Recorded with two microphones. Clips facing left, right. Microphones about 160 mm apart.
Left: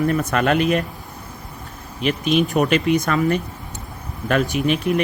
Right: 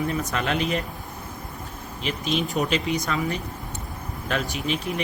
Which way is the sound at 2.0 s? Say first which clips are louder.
Left 8 dB; 60° left (ahead or behind).